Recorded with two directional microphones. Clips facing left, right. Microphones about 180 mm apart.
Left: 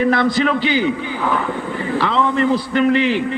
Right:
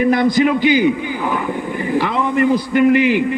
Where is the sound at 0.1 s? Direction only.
20° right (ahead or behind).